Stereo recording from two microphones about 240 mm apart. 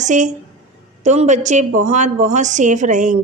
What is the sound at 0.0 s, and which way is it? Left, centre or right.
A woman's voice, right.